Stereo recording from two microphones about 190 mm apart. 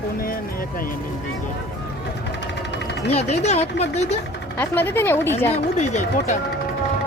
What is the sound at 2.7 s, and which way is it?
Engine, 65° left (ahead or behind).